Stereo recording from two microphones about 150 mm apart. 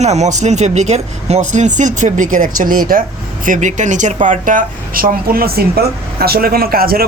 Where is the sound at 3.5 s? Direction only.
55° right (ahead or behind).